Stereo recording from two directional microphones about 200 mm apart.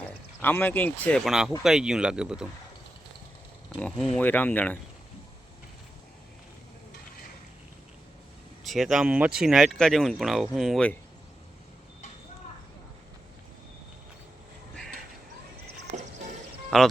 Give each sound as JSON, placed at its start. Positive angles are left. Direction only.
{"t": 0.4, "sound": "speech", "side_deg": 10}
{"t": 3.8, "sound": "speech", "side_deg": 5}
{"t": 8.6, "sound": "speech", "side_deg": 0}
{"t": 15.9, "sound": "music", "side_deg": -35}
{"t": 16.7, "sound": "speech", "side_deg": 0}